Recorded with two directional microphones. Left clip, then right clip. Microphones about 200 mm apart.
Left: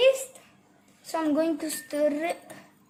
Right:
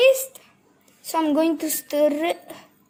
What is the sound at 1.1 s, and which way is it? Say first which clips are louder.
A woman's voice: right 5 dB; 40° right (ahead or behind).